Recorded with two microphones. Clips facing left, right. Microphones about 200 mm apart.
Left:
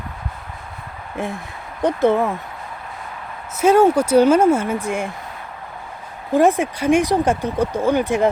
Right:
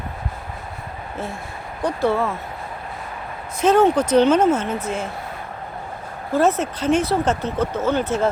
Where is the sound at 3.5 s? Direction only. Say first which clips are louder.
Left 2 dB; 10° left (ahead or behind).